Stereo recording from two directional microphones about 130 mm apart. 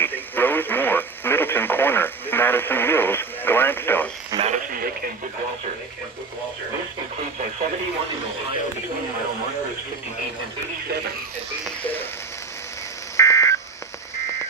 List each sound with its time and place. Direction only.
0.0 s radio: 15° left (ahead or behind)
4.4 s radio: 65° right (ahead or behind)
13.1 s telephone dialing: 20° left (ahead or behind)